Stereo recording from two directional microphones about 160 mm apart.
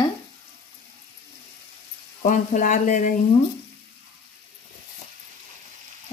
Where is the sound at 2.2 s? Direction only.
55° left (ahead or behind).